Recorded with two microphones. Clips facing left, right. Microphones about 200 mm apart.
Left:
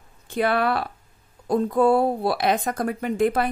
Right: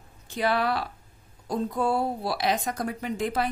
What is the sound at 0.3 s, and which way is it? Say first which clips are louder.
Speech: left 4 dB; 55° left (ahead or behind).